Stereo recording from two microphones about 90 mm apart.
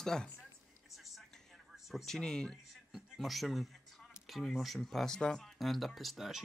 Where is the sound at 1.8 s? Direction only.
Centre (ahead or behind).